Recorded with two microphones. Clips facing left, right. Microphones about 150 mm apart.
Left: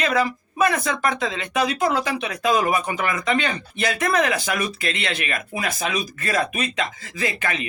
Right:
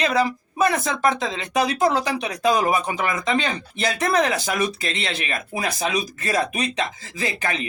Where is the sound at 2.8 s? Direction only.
20° right (ahead or behind).